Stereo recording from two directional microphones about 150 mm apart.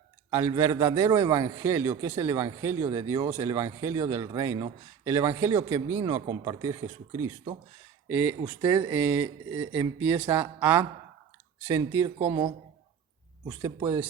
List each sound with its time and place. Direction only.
0.3 s a man's voice: 15° right (ahead or behind)
13.5 s a man's voice: 20° right (ahead or behind)